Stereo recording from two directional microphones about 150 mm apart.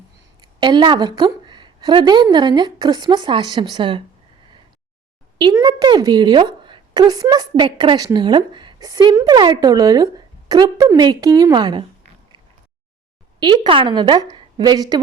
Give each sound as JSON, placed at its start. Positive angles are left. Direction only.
{"t": 0.6, "sound": "a woman's voice", "side_deg": -30}
{"t": 5.4, "sound": "a woman's voice", "side_deg": -30}
{"t": 13.4, "sound": "a woman's voice", "side_deg": -35}